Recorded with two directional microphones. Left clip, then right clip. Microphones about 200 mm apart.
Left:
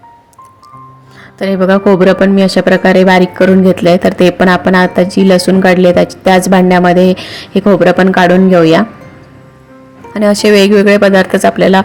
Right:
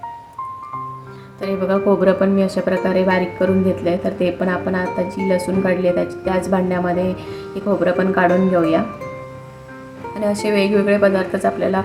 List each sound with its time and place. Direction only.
1.4 s speech: 40° left (ahead or behind)
10.2 s speech: 45° left (ahead or behind)